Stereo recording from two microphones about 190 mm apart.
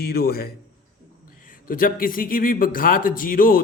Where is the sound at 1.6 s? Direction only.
45° left (ahead or behind).